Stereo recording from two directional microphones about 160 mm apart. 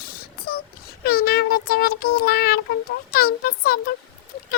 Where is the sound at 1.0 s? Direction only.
75° left (ahead or behind).